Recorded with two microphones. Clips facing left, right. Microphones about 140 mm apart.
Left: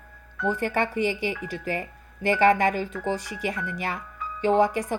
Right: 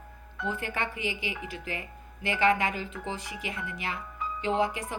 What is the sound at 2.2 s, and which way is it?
Speech, 45° left (ahead or behind).